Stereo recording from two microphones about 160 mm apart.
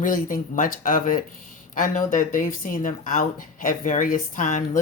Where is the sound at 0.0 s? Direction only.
55° left (ahead or behind).